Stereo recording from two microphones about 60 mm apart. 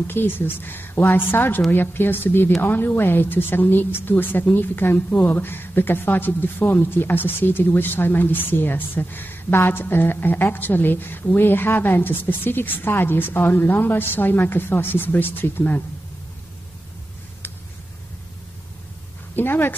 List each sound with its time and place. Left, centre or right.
0.0 s a woman's voice: left
17.4 s a sound: left
19.3 s a woman's voice: left